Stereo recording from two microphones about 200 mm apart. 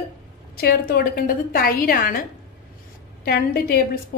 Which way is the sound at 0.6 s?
50° left (ahead or behind).